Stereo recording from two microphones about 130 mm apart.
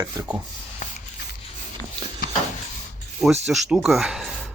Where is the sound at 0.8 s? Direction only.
65° left (ahead or behind).